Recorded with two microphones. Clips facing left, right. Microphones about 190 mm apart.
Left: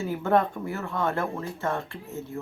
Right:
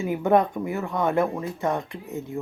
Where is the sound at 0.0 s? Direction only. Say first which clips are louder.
Right 3 dB; 15° right (ahead or behind).